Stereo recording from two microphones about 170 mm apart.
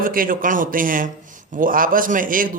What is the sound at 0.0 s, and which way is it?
Speech, 55° right (ahead or behind).